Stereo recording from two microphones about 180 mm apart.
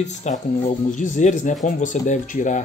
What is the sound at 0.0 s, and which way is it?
Speech, 40° left (ahead or behind).